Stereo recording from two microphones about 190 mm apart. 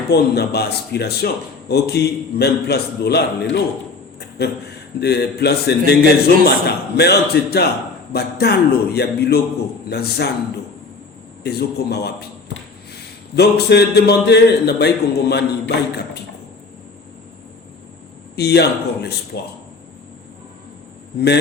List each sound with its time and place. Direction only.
0.1 s a man's voice: 60° left (ahead or behind)
4.9 s a man's voice: 60° left (ahead or behind)
11.4 s a man's voice: 60° left (ahead or behind)
13.3 s a man's voice: 60° left (ahead or behind)
18.3 s a man's voice: 60° left (ahead or behind)